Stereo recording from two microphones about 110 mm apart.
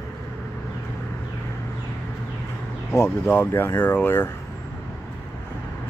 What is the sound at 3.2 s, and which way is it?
Speech, 15° left (ahead or behind).